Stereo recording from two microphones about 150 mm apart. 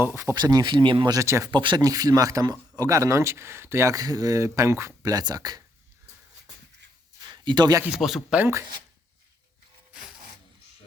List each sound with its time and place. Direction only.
0.0 s speech: 15° right (ahead or behind)
7.3 s a sound: 30° right (ahead or behind)
7.9 s speech: 5° right (ahead or behind)